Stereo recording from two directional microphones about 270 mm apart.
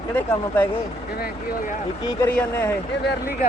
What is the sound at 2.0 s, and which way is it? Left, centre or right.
Speech, centre.